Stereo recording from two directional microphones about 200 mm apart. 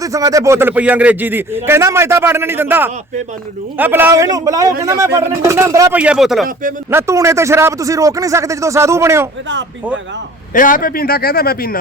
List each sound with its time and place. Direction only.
0.0 s speech: 15° right (ahead or behind); by 6.5 s centre (ahead or behind)
6.9 s speech: 15° right (ahead or behind)
10.5 s a man's voice: 45° left (ahead or behind)